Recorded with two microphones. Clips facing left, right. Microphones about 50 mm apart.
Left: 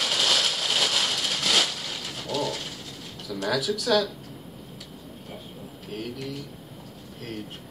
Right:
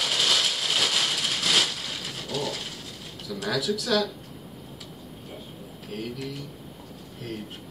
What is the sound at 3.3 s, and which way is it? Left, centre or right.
Speech, centre.